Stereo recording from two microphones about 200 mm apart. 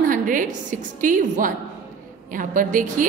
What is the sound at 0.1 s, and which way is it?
A woman's voice, 40° right (ahead or behind).